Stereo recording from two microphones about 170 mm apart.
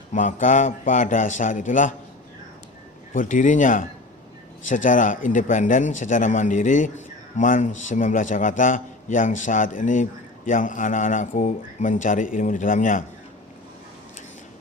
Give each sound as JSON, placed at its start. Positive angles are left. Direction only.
{"t": 0.1, "sound": "speech", "side_deg": 45}
{"t": 3.1, "sound": "speech", "side_deg": 50}